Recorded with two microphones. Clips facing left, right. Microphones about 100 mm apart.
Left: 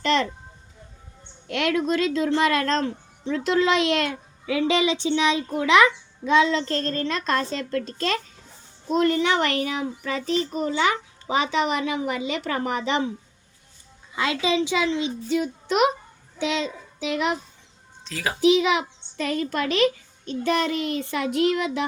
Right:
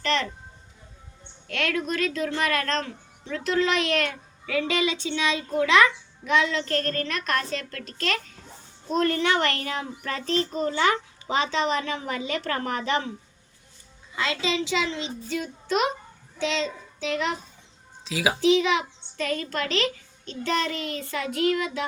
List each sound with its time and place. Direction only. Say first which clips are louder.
0.0 s music: left 4 dB; 20° left (ahead or behind)
1.5 s a child's voice: left 5 dB; 20° left (ahead or behind)
14.2 s a child's voice: left 4 dB; 15° left (ahead or behind)
18.0 s speech: right 3 dB; 5° right (ahead or behind)
18.3 s speech: left 3 dB; 15° left (ahead or behind)